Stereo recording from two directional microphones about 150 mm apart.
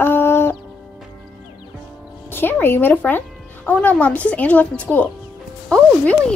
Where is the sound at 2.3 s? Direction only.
15° left (ahead or behind).